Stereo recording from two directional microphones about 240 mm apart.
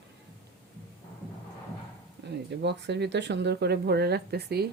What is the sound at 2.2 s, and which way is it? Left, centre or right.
Speech, right.